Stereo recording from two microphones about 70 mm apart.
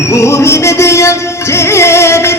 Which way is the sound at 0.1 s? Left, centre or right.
Left.